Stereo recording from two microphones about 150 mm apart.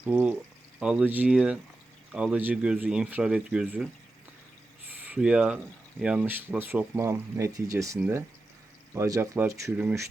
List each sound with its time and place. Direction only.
0.0 s speech: 10° right (ahead or behind)
5.0 s speech: 5° right (ahead or behind)
9.0 s speech: 20° right (ahead or behind)